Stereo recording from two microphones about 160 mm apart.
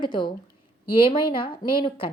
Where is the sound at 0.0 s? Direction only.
30° left (ahead or behind).